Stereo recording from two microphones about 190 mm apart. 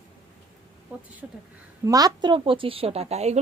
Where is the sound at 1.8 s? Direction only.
20° right (ahead or behind); by 3.4 s 35° right (ahead or behind).